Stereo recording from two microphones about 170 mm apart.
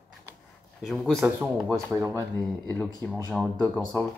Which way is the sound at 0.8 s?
Centre (ahead or behind).